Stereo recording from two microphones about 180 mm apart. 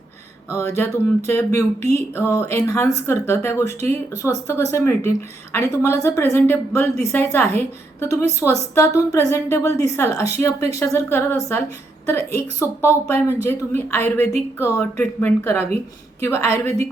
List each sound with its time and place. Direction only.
0.5 s speech: 15° left (ahead or behind)